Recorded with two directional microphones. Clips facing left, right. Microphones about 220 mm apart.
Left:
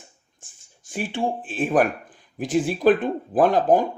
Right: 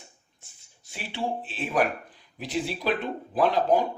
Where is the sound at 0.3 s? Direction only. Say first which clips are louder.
Left 4 dB; 50° left (ahead or behind).